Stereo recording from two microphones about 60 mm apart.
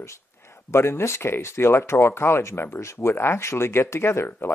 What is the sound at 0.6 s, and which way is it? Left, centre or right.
Speech, left.